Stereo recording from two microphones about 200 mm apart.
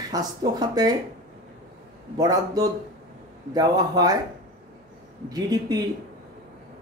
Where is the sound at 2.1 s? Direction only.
20° right (ahead or behind).